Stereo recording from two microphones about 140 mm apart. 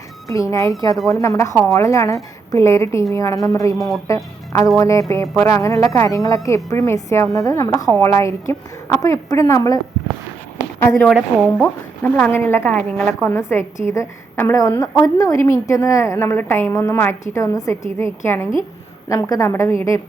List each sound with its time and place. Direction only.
0.3 s a woman's voice: 25° left (ahead or behind)
3.8 s speech: centre (ahead or behind)
4.0 s a woman's voice: 25° left (ahead or behind)
10.8 s a woman's voice: 10° left (ahead or behind)